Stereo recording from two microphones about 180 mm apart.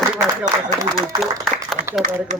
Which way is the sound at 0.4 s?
20° right (ahead or behind).